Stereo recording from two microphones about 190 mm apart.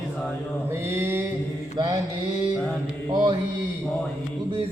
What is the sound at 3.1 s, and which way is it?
Mantra, 25° right (ahead or behind).